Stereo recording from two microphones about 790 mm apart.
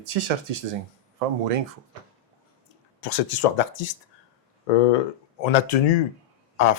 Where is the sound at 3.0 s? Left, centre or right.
Left.